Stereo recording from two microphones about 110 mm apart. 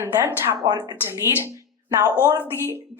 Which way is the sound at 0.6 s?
40° right (ahead or behind).